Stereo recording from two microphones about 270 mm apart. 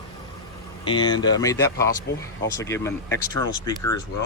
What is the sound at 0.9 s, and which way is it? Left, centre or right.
Speech, centre.